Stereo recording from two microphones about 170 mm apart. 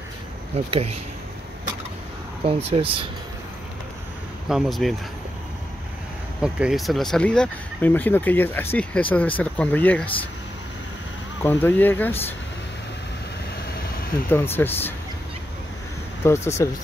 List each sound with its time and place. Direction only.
0.7 s speech: 35° right (ahead or behind)
2.4 s speech: 35° right (ahead or behind)
4.5 s speech: centre (ahead or behind)
6.4 s speech: 5° right (ahead or behind)
11.4 s speech: 10° left (ahead or behind)
14.3 s speech: 15° left (ahead or behind)
16.2 s speech: 15° left (ahead or behind)